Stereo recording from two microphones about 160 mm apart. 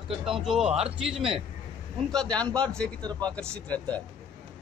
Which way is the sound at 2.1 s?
5° left (ahead or behind).